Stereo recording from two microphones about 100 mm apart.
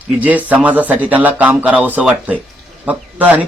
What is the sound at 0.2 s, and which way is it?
A man's voice, 15° right (ahead or behind).